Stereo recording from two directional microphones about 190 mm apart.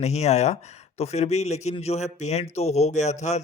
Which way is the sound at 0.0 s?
35° left (ahead or behind).